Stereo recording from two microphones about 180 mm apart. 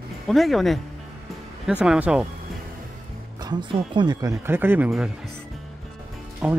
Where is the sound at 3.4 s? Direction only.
25° right (ahead or behind); by 5.1 s 5° right (ahead or behind).